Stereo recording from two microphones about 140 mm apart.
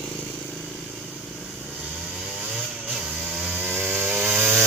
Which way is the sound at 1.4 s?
10° right (ahead or behind).